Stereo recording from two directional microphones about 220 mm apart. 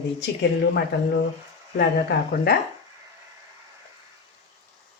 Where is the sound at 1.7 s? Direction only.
45° left (ahead or behind).